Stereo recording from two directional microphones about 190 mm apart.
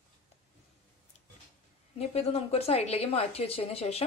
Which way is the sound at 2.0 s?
35° left (ahead or behind).